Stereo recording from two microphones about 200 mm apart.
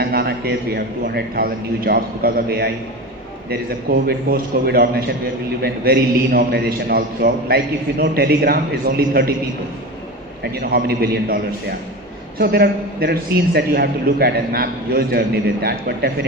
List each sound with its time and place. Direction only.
0.0 s a man's voice: 50° right (ahead or behind)
4.0 s a man's voice: 50° right (ahead or behind)
10.6 s a man's voice: 50° right (ahead or behind)
12.4 s a man's voice: 50° right (ahead or behind)